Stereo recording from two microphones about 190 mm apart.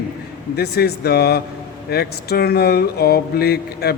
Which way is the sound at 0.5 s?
55° left (ahead or behind).